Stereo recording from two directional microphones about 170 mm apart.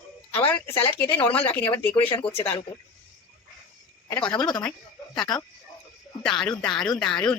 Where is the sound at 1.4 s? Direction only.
10° left (ahead or behind).